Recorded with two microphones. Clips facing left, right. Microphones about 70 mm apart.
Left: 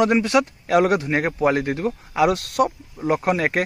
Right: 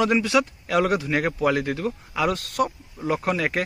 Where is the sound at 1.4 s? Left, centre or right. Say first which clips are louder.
Left 3 dB; left.